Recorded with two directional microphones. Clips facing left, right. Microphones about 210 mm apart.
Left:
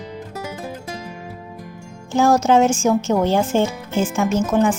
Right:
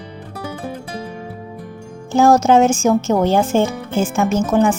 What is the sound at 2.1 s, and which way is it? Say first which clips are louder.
A woman's voice: right 3 dB; 50° right (ahead or behind).